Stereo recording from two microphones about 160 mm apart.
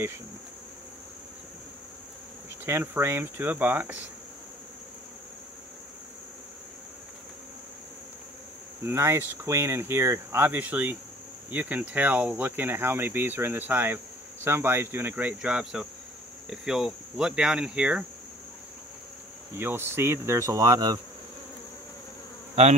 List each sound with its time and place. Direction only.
2.6 s speech: 15° right (ahead or behind)
8.8 s speech: 15° right (ahead or behind)
16.4 s cricket: 5° right (ahead or behind)
19.5 s speech: 15° right (ahead or behind)